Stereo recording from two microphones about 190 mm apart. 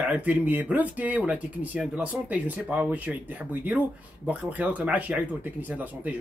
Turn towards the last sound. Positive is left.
turn(degrees=-10)  # may be behind; listen again after turning